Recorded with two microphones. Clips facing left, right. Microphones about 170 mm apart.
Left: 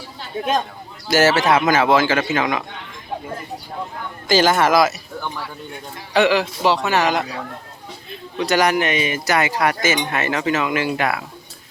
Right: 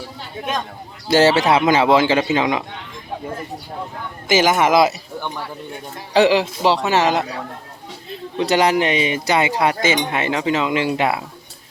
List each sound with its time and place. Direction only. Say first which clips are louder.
1.0 s speech: right 2 dB; 25° right (ahead or behind)
4.4 s speech: right 1 dB; 15° right (ahead or behind)
6.1 s speech: right 2 dB; 30° right (ahead or behind)
8.4 s speech: right 1 dB; 25° right (ahead or behind)